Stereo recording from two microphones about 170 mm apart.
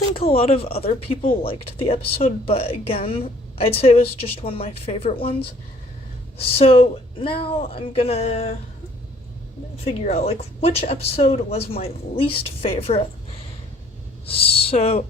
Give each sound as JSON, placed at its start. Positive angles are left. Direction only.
{"t": 0.3, "sound": "speech", "side_deg": 35}
{"t": 9.7, "sound": "speech", "side_deg": 35}
{"t": 14.3, "sound": "speech", "side_deg": 35}